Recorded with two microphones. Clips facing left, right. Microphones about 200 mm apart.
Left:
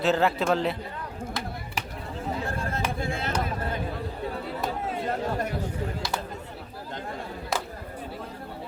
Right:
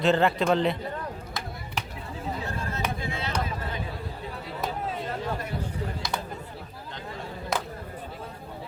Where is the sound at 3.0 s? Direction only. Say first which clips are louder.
Left 3 dB; 50° left (ahead or behind).